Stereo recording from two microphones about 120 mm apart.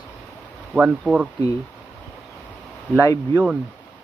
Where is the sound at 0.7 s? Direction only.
10° right (ahead or behind).